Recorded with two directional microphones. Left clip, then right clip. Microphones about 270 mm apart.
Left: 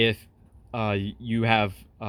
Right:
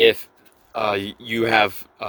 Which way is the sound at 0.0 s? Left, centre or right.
Right.